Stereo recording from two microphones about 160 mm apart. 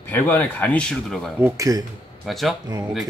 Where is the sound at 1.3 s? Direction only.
15° right (ahead or behind).